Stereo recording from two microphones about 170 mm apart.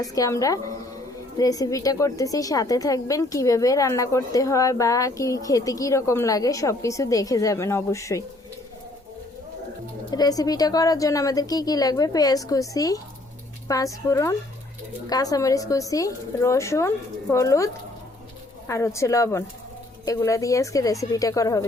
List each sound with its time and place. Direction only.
0.0 s a woman's voice: 20° left (ahead or behind)
10.1 s a woman's voice: 20° left (ahead or behind)
18.7 s a woman's voice: 15° left (ahead or behind)